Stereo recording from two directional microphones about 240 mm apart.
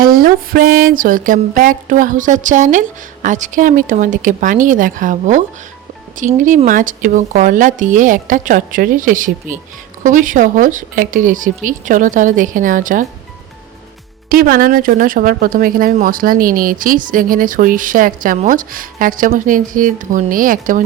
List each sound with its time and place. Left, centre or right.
0.0 s speech: right
14.3 s speech: right